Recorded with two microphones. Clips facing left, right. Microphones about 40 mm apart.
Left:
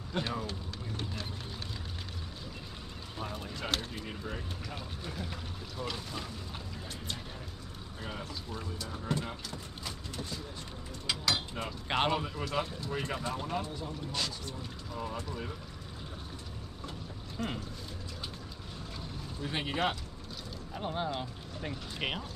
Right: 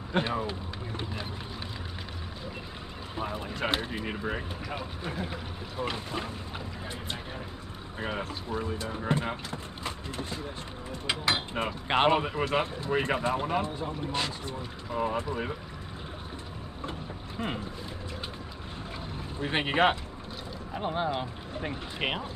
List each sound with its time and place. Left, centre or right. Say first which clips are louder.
0.2 s speech: right 4 dB; right
3.2 s speech: right 7 dB; right
8.0 s speech: right 8 dB; right
17.4 s speech: right 3 dB; right
19.3 s speech: right 7 dB; right
20.7 s speech: right 5 dB; centre